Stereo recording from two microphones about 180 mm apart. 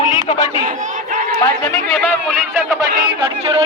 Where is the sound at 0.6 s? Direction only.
45° right (ahead or behind).